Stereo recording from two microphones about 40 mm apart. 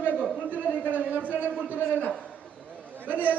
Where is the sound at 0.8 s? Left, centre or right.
Right.